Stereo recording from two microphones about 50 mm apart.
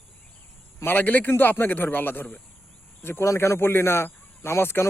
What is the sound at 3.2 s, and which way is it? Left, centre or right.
Speech, left.